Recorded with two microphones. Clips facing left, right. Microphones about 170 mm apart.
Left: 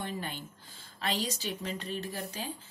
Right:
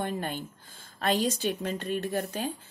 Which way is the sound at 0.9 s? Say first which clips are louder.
Right 7 dB; 50° right (ahead or behind).